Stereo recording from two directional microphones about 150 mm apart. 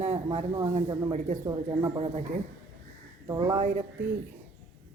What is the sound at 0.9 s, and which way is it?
Speech, 25° right (ahead or behind).